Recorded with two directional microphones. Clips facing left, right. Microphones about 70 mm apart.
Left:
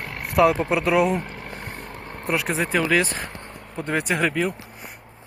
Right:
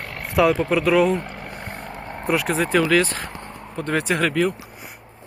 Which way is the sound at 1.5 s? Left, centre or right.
Right.